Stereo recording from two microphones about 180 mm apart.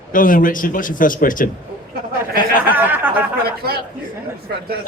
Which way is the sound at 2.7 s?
10° right (ahead or behind).